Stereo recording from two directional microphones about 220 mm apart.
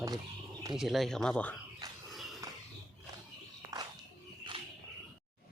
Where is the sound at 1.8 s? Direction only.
15° right (ahead or behind).